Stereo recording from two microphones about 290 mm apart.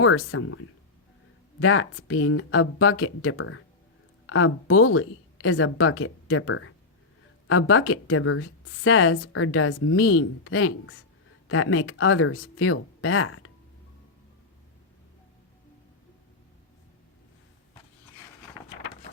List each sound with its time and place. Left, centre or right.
0.0 s speech: left